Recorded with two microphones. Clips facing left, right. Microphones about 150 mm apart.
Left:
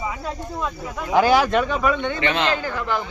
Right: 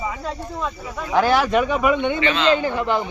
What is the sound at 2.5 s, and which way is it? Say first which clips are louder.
Speech: right 5 dB; 20° right (ahead or behind).